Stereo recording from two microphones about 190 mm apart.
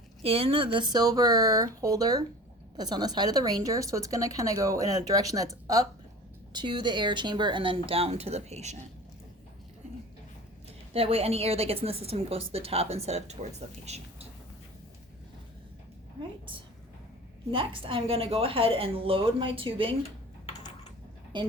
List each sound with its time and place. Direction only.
0.2 s a woman's voice: 30° right (ahead or behind)
10.9 s a woman's voice: 30° right (ahead or behind)
17.5 s a woman's voice: 30° right (ahead or behind)
21.3 s a woman's voice: 25° right (ahead or behind)